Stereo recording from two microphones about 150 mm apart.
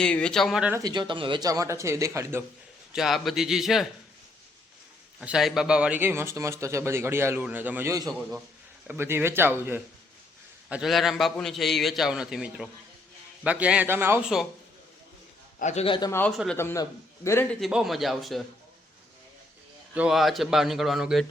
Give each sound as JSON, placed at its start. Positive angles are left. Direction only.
{"t": 0.0, "sound": "a man's voice", "side_deg": 5}
{"t": 0.7, "sound": "speech", "side_deg": -25}
{"t": 2.9, "sound": "a man's voice", "side_deg": 0}
{"t": 5.2, "sound": "speech", "side_deg": -5}
{"t": 8.0, "sound": "a man's voice", "side_deg": 0}
{"t": 8.9, "sound": "speech", "side_deg": -15}
{"t": 10.7, "sound": "a man's voice", "side_deg": -5}
{"t": 15.5, "sound": "a man's voice", "side_deg": 50}
{"t": 16.0, "sound": "a man's voice", "side_deg": 25}
{"t": 17.6, "sound": "a man's voice", "side_deg": -5}
{"t": 19.9, "sound": "a man's voice", "side_deg": -5}